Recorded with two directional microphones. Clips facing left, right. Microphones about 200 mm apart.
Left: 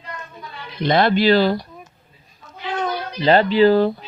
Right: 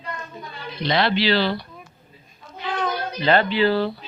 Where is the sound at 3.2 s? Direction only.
35° left (ahead or behind).